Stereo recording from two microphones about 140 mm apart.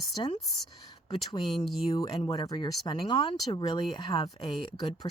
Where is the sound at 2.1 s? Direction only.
45° left (ahead or behind).